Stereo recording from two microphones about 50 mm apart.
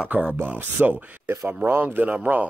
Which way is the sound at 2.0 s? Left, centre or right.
Right.